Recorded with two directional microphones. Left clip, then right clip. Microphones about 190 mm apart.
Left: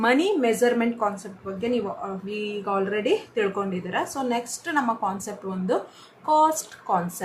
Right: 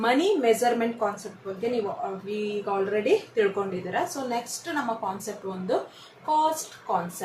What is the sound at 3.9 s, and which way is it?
Speech, 20° left (ahead or behind).